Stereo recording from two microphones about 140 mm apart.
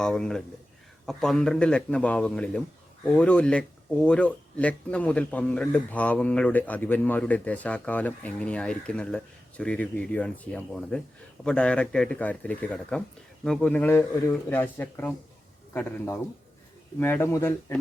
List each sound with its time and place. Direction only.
0.0 s speech: 5° left (ahead or behind)